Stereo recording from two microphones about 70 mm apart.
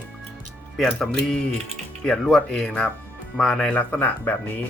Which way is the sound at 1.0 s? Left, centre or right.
Centre.